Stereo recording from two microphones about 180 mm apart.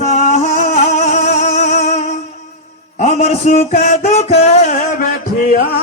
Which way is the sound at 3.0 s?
35° left (ahead or behind).